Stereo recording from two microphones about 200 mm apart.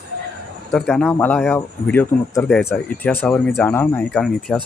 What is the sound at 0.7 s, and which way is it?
Speech, 5° left (ahead or behind).